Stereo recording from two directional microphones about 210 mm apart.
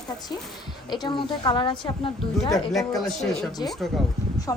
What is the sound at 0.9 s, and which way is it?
A woman's voice, 20° left (ahead or behind).